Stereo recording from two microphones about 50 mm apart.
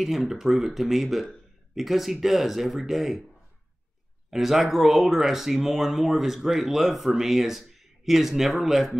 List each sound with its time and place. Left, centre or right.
0.0 s speech: centre
4.3 s speech: centre